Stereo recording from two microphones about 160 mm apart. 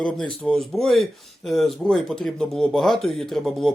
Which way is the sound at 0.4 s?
Centre (ahead or behind).